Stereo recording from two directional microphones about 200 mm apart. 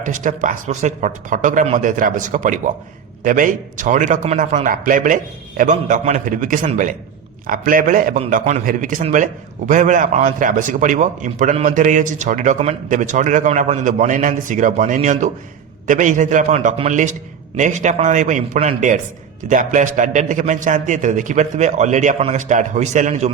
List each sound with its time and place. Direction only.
0.0 s a man's voice: 40° right (ahead or behind)